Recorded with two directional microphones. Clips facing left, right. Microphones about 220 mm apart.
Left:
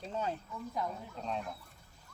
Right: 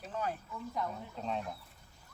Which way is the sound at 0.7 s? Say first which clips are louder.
Even; centre (ahead or behind).